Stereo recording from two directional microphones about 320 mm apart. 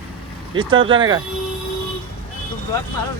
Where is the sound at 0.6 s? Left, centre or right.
Centre.